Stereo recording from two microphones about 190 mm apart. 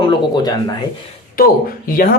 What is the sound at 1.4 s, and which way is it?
Speech, 50° left (ahead or behind).